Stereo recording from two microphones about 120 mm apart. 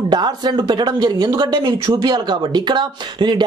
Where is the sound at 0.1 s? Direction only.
35° right (ahead or behind).